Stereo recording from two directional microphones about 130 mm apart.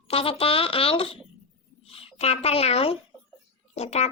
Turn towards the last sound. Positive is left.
turn(degrees=55)  # may be behind; listen again after turning